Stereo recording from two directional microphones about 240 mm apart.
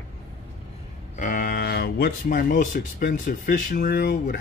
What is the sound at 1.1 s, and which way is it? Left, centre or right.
Speech, left.